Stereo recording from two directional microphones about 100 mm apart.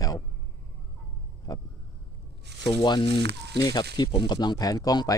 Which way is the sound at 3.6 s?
45° left (ahead or behind).